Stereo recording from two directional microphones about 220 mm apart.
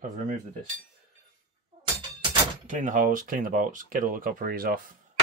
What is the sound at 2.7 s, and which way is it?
Speech, 35° right (ahead or behind).